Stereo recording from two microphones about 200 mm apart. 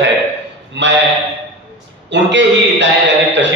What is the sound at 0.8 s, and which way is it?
Speech, 65° right (ahead or behind).